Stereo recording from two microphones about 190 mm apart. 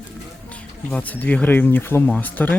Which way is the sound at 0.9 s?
10° left (ahead or behind).